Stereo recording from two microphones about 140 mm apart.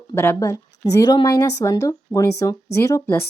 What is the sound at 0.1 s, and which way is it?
Speech, 20° left (ahead or behind).